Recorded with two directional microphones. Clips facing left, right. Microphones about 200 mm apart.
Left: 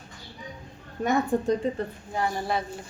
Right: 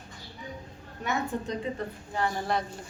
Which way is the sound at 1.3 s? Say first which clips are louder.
Left 8 dB; 40° left (ahead or behind).